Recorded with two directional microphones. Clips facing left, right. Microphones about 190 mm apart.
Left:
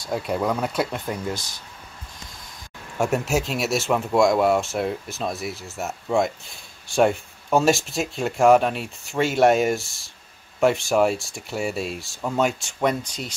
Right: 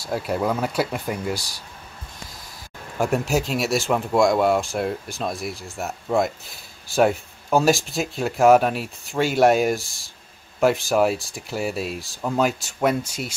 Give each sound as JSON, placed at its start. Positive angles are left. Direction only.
{"t": 0.0, "sound": "speech", "side_deg": -5}
{"t": 1.3, "sound": "speech", "side_deg": -35}
{"t": 3.0, "sound": "speech", "side_deg": 0}